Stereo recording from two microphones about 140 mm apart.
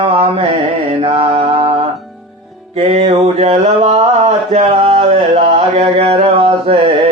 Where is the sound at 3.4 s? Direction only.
50° right (ahead or behind).